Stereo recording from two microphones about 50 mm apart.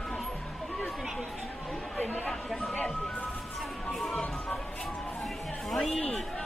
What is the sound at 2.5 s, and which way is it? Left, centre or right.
Music, centre.